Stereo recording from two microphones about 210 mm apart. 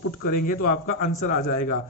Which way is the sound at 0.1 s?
40° left (ahead or behind).